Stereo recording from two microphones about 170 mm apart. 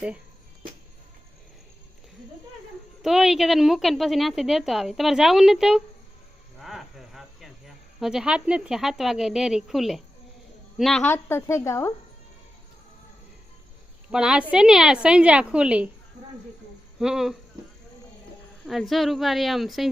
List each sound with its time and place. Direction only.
3.0 s speech: centre (ahead or behind)
6.6 s a sound: centre (ahead or behind)
7.9 s speech: 5° right (ahead or behind)
11.1 s speech: 15° left (ahead or behind)
14.1 s speech: 5° right (ahead or behind)
17.0 s speech: 5° right (ahead or behind)
18.6 s speech: centre (ahead or behind)